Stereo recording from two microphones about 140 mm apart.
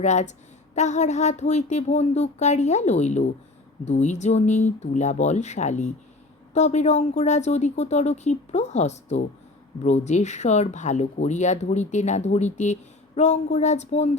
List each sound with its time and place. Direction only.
0.0 s speech: 55° left (ahead or behind)